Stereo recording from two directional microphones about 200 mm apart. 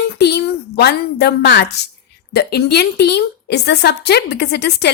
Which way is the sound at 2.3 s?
55° left (ahead or behind).